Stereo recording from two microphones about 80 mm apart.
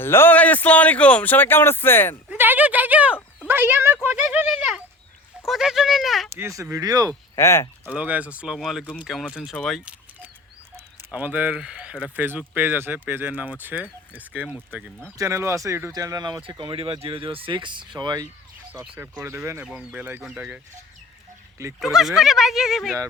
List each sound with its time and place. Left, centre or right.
0.0 s speech: left
2.4 s a sound: right
5.5 s speech: centre
6.3 s speech: right
7.3 s speech: left
7.9 s speech: centre
8.5 s speech: centre
9.6 s speech: centre
11.1 s speech: centre
15.2 s speech: right
16.4 s speech: right
19.1 s speech: right
19.6 s speech: centre
21.8 s speech: centre